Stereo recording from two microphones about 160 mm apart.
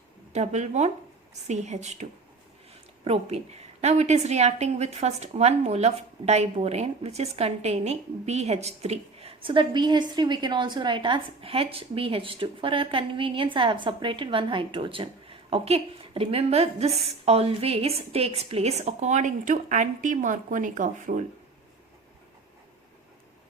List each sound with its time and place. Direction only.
0.3 s a woman's voice: 45° right (ahead or behind)